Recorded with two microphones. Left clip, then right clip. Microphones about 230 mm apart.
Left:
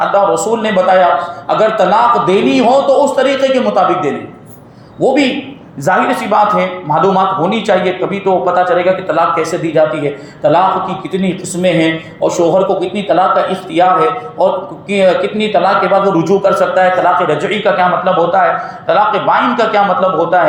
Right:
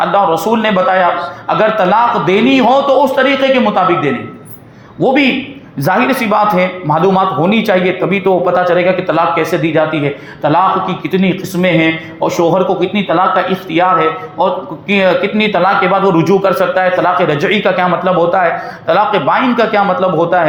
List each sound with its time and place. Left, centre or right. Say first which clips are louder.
0.0 s a man's voice: even; right
5.8 s a man's voice: even; right